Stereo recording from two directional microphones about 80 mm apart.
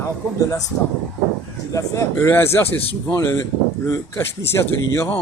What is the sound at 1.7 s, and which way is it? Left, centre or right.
Speech, left.